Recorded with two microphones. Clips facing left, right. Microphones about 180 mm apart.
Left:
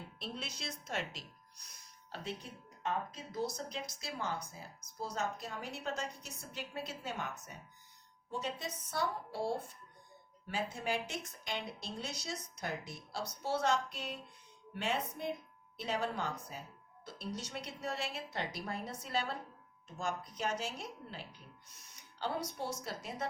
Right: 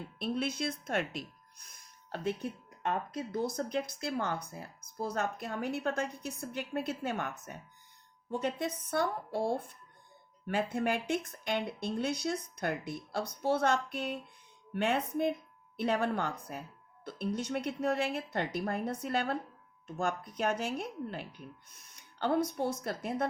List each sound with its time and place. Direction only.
0.2 s a woman's voice: 55° right (ahead or behind)